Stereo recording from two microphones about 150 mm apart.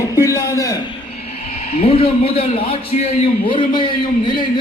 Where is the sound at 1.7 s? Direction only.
40° left (ahead or behind).